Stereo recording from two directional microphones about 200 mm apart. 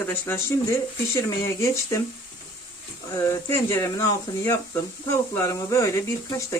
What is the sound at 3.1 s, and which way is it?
Speech, 15° left (ahead or behind).